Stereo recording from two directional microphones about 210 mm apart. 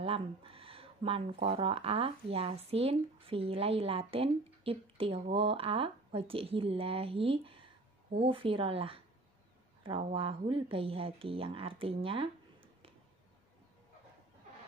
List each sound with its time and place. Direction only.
0.0 s speech: 25° right (ahead or behind)